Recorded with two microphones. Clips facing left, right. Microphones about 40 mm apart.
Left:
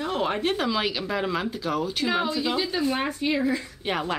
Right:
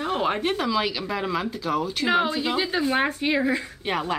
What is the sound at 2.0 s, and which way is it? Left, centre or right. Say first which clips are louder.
Speech: right 4 dB; right.